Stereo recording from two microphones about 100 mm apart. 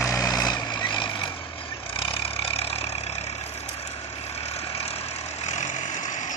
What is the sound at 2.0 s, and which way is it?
Vehicle, 75° left (ahead or behind).